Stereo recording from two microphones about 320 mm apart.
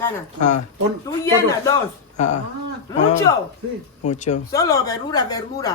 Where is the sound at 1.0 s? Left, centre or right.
Centre.